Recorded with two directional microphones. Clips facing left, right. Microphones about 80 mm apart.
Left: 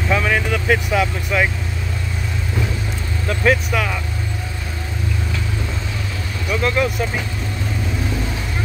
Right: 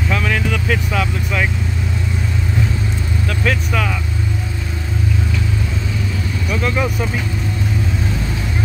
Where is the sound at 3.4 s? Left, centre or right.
Centre.